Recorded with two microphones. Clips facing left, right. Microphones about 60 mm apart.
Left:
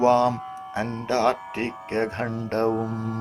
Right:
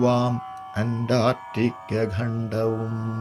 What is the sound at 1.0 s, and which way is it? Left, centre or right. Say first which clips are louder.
Music: even; centre.